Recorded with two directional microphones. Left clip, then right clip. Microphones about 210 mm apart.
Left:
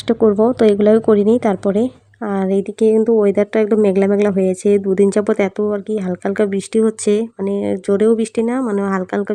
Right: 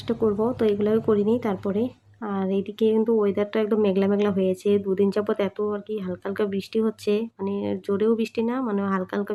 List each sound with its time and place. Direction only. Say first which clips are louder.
0.1 s a woman's voice: left 10 dB; 35° left (ahead or behind)